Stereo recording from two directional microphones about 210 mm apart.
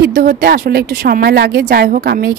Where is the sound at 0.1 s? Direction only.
40° right (ahead or behind).